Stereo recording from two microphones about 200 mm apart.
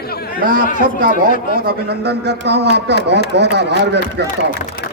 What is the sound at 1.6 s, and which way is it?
Speech, 55° right (ahead or behind).